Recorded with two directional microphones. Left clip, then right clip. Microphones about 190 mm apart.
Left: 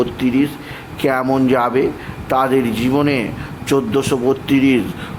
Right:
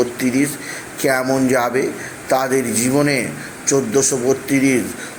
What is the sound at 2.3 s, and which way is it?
A man's voice, 15° left (ahead or behind).